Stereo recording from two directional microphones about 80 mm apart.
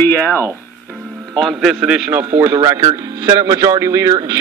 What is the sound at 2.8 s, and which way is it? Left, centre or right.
Speech, right.